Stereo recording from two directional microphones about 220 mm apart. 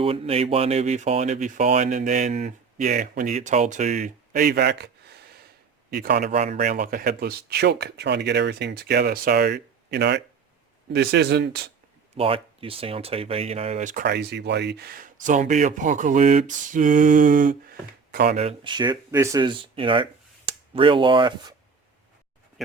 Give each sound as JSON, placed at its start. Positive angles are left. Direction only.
{"t": 0.0, "sound": "speech", "side_deg": -25}
{"t": 6.3, "sound": "speech", "side_deg": -30}
{"t": 12.1, "sound": "speech", "side_deg": -25}
{"t": 18.3, "sound": "speech", "side_deg": -25}